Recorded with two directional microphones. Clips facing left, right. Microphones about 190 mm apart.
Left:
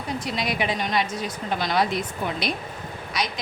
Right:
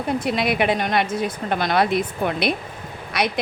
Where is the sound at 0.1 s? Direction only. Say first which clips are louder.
Right 6 dB; 60° right (ahead or behind).